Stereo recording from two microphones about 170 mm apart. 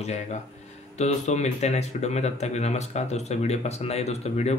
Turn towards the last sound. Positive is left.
turn(degrees=40)  # may be behind; listen again after turning